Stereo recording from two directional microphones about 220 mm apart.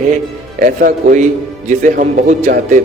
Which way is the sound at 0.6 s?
35° right (ahead or behind).